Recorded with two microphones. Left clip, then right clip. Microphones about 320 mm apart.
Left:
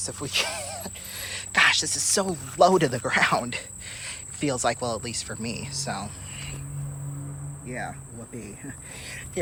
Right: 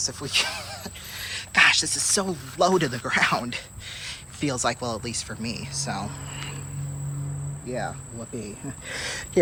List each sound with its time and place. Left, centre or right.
0.0 s speech: centre
8.9 s speech: right